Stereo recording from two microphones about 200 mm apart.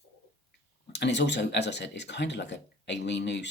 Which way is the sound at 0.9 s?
60° left (ahead or behind).